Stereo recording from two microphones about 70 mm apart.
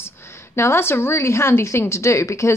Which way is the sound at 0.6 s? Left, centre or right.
Left.